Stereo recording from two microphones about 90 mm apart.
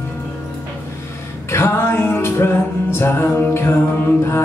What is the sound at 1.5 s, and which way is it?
Music, 25° left (ahead or behind).